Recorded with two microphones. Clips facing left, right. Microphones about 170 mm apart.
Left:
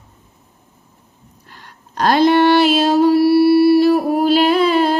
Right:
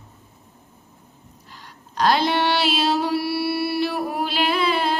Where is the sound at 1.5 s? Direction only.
55° left (ahead or behind).